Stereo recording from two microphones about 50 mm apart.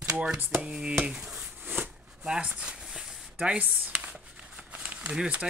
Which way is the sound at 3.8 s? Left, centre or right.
Right.